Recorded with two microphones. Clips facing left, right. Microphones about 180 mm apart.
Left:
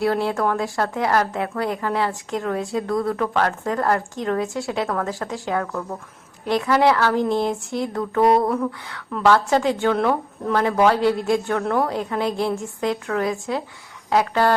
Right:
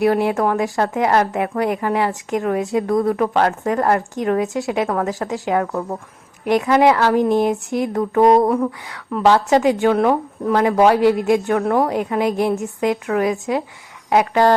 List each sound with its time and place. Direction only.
0.0 s speech: 15° right (ahead or behind)